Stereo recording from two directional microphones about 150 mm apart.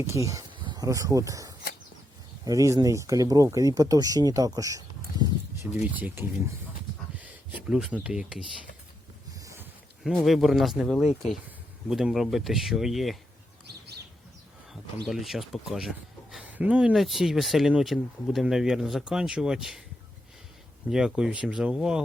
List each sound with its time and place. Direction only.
0.0 s speech: 20° right (ahead or behind)
5.8 s speech: 10° right (ahead or behind)
9.4 s a sound: 20° right (ahead or behind)
10.0 s speech: centre (ahead or behind)
15.0 s speech: centre (ahead or behind)
20.9 s speech: 5° right (ahead or behind)